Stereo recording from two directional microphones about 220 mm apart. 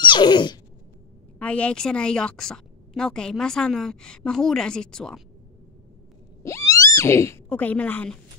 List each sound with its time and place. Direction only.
0.0 s a sound: 20° left (ahead or behind)
1.4 s a woman's voice: 5° left (ahead or behind)
6.4 s speech: 15° left (ahead or behind)